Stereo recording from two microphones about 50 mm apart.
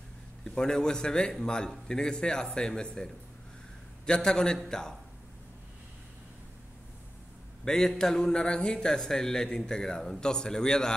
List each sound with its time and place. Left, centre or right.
0.4 s speech: centre
7.6 s speech: centre